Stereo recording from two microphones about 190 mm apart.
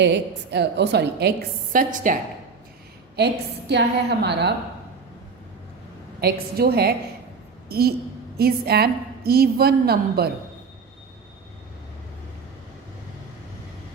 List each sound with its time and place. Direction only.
0.0 s a woman's voice: 65° right (ahead or behind); by 2.1 s 45° right (ahead or behind)
3.7 s a woman's voice: 65° right (ahead or behind)
6.1 s a woman's voice: 55° right (ahead or behind)